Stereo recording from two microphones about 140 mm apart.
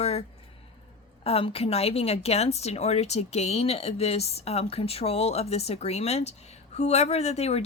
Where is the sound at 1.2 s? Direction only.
45° left (ahead or behind).